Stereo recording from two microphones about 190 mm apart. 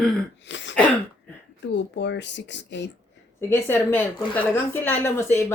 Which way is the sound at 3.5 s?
10° left (ahead or behind).